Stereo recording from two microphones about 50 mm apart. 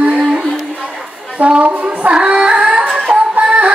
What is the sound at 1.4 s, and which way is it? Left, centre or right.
Music, right.